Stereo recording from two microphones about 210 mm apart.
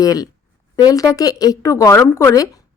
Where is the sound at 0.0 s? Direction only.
15° left (ahead or behind).